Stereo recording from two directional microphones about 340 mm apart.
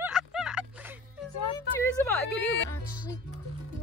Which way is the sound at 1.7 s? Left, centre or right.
Centre.